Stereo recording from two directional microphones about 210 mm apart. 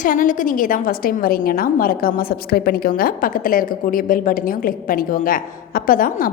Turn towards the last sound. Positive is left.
turn(degrees=40)  # may be behind; listen again after turning